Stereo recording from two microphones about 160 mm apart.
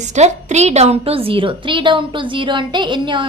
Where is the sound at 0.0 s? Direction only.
45° right (ahead or behind).